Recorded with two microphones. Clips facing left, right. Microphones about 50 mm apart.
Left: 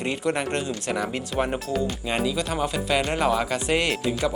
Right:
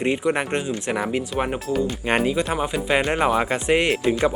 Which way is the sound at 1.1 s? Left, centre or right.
Centre.